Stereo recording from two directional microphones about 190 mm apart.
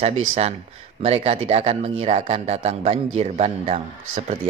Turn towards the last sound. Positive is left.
turn(degrees=-35)  # may be behind; listen again after turning